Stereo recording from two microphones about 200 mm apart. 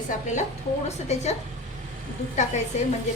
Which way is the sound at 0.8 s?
35° left (ahead or behind).